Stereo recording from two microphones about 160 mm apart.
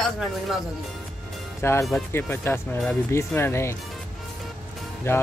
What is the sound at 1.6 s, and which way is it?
Speech, 15° left (ahead or behind).